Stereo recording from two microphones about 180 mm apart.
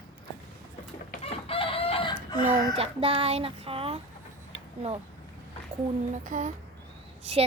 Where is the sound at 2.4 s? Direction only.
35° right (ahead or behind).